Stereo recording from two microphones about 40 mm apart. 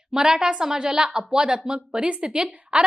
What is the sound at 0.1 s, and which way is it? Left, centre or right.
A woman's voice, centre.